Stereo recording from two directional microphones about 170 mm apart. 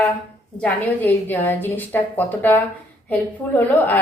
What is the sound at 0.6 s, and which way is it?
A woman's voice, 10° left (ahead or behind).